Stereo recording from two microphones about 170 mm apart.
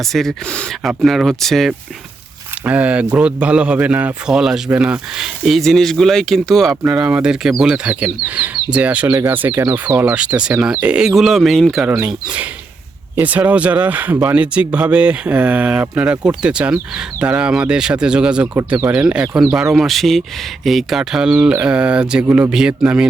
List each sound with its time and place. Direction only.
0.0 s a man's voice: centre (ahead or behind)